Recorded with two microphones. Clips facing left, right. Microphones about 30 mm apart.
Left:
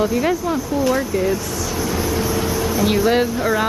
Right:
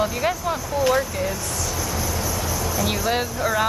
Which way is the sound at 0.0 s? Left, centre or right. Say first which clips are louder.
Left 4 dB; centre.